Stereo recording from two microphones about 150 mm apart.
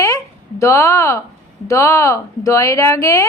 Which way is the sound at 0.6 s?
20° left (ahead or behind).